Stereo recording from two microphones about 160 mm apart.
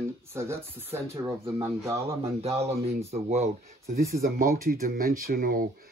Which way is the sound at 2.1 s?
40° right (ahead or behind).